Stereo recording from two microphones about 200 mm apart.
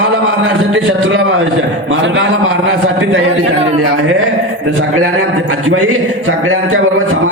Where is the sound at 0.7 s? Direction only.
90° right.